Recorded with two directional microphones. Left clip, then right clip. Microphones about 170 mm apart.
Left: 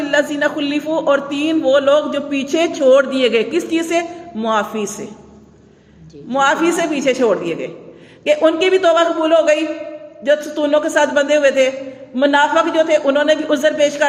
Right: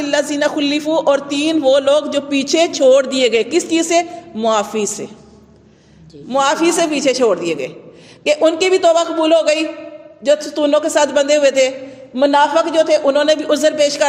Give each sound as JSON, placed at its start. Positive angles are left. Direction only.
{"t": 0.0, "sound": "a man's voice", "side_deg": -45}
{"t": 6.2, "sound": "a man's voice", "side_deg": -45}